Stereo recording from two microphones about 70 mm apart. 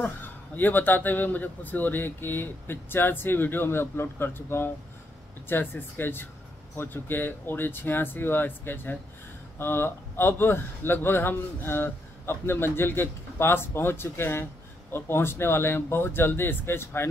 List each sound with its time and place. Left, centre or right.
0.0 s a man's voice: left